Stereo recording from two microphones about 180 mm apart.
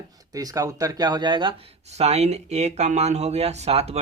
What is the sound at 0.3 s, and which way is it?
Speech, 20° right (ahead or behind).